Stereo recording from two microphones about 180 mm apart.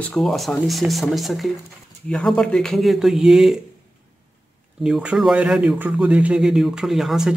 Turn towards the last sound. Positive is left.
turn(degrees=0)  # may be behind; listen again after turning